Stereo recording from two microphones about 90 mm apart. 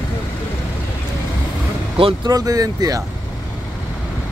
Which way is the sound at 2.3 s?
40° right (ahead or behind).